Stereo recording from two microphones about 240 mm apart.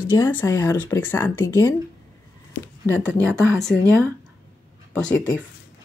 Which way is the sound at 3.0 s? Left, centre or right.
Centre.